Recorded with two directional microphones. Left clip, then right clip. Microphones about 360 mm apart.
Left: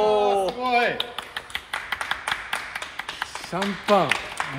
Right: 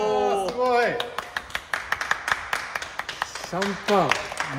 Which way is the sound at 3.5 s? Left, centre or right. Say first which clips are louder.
Left 2 dB; centre.